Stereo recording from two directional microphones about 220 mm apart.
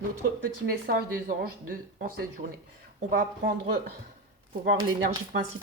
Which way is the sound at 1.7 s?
40° right (ahead or behind).